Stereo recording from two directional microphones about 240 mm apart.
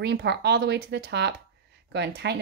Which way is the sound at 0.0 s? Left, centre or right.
Right.